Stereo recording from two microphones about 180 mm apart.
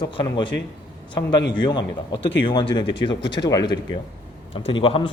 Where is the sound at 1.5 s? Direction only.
25° left (ahead or behind).